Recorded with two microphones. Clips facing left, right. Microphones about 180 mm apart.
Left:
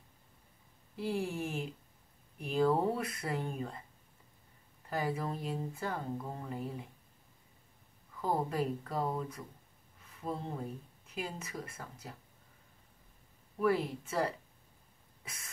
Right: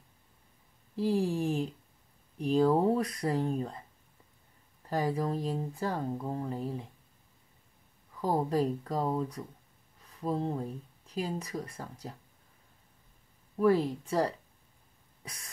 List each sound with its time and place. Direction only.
0.9 s speech: 35° right (ahead or behind)
4.8 s speech: 35° right (ahead or behind)
8.2 s speech: 35° right (ahead or behind)
10.0 s a sound: 35° right (ahead or behind)
11.1 s speech: 35° right (ahead or behind)
13.6 s speech: 35° right (ahead or behind)